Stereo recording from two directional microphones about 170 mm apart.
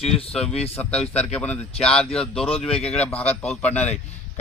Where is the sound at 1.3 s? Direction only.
10° left (ahead or behind).